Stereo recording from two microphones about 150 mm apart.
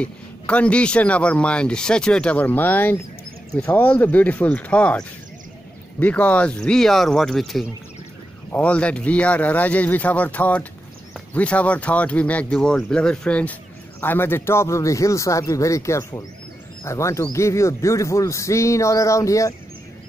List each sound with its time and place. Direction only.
0.0 s a man's voice: 10° left (ahead or behind)